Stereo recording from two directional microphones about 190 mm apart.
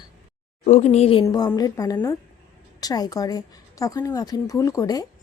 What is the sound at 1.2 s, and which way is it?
A woman's voice, 20° left (ahead or behind).